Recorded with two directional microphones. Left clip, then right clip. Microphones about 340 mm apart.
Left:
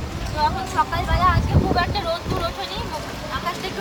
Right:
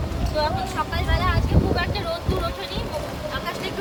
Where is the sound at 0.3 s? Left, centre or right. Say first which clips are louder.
Left 3 dB; centre.